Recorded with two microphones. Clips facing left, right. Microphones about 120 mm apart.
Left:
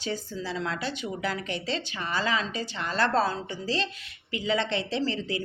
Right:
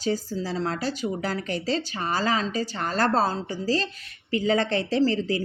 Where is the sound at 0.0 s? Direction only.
40° right (ahead or behind).